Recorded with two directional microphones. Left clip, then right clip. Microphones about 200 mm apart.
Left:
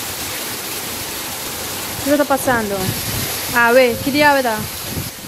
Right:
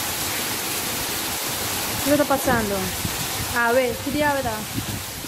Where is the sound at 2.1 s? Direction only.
20° left (ahead or behind).